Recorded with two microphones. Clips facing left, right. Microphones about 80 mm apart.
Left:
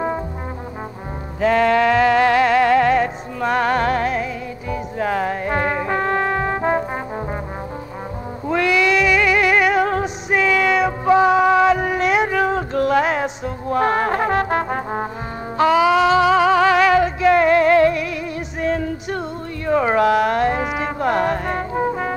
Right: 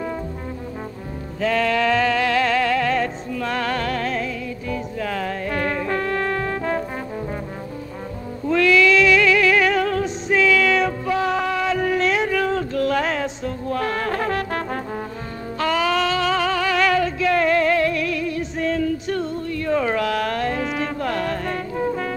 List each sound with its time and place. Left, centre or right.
1.4 s music: left
8.5 s a sound: left
9.3 s music: left